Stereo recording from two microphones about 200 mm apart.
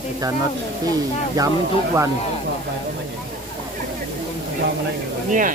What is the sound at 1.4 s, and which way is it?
Speech, 20° right (ahead or behind).